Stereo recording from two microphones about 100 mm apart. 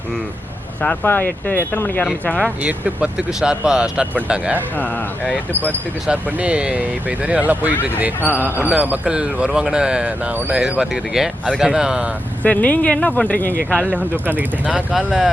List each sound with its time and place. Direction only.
0.8 s speech: 15° left (ahead or behind)
2.6 s speech: 15° right (ahead or behind)
4.8 s speech: 15° left (ahead or behind)
6.1 s speech: 15° right (ahead or behind)
12.4 s speech: 15° left (ahead or behind)
13.9 s speech: 20° right (ahead or behind)
14.9 s speech: centre (ahead or behind)